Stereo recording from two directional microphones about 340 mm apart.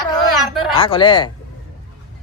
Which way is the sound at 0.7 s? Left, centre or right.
Centre.